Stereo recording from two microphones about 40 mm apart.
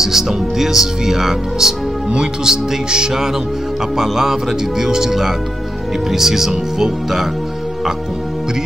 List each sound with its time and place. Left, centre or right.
0.0 s speech: centre